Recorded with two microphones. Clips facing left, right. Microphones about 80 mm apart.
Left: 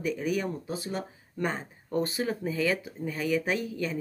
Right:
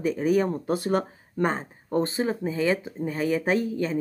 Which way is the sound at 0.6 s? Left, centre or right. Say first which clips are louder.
Right 9 dB; right.